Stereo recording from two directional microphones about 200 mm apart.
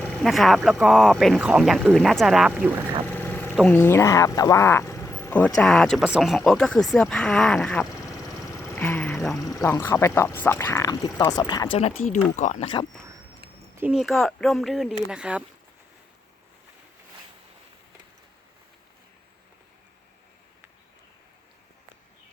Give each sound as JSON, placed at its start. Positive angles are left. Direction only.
{"t": 0.0, "sound": "speech", "side_deg": 5}
{"t": 3.1, "sound": "a sound", "side_deg": 10}
{"t": 3.7, "sound": "speech", "side_deg": 10}
{"t": 9.4, "sound": "speech", "side_deg": 15}
{"t": 12.4, "sound": "speech", "side_deg": 35}
{"t": 13.7, "sound": "speech", "side_deg": -5}